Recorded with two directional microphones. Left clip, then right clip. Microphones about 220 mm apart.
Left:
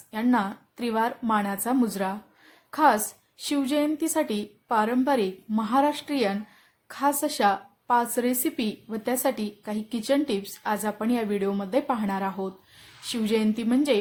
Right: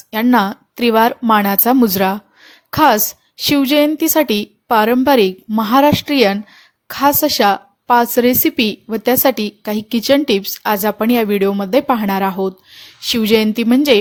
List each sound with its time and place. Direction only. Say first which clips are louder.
0.1 s a woman's voice: right 11 dB; 35° right (ahead or behind)